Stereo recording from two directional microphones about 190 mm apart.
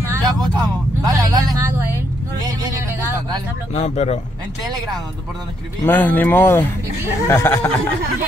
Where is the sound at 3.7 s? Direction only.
35° left (ahead or behind).